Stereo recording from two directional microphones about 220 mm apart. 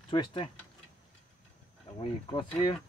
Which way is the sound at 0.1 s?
20° left (ahead or behind).